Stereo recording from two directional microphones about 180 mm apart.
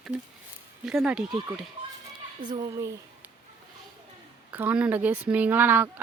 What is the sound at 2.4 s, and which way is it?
Speech, 25° right (ahead or behind).